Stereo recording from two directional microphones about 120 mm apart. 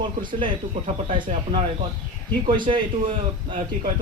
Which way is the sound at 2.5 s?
45° right (ahead or behind).